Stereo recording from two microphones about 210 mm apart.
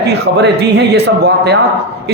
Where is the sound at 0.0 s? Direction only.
50° right (ahead or behind).